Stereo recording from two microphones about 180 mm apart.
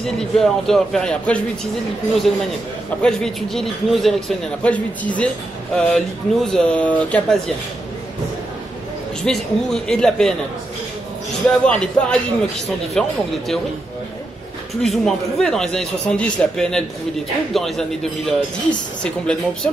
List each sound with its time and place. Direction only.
0.0 s speech: 5° left (ahead or behind)
3.0 s a man's voice: 5° left (ahead or behind)
9.2 s speech: 5° left (ahead or behind)
11.4 s speech: 5° left (ahead or behind)
14.8 s speech: centre (ahead or behind)